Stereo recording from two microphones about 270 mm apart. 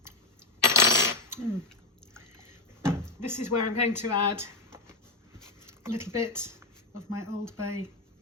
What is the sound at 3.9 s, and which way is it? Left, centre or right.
Speech, centre.